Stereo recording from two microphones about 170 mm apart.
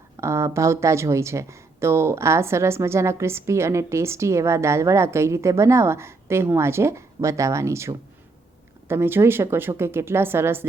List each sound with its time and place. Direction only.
0.2 s speech: 15° right (ahead or behind)